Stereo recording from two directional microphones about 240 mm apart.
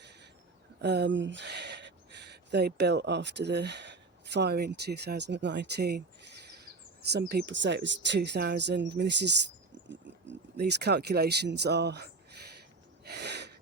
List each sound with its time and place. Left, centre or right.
0.8 s speech: right
10.6 s speech: right
13.1 s a sound: right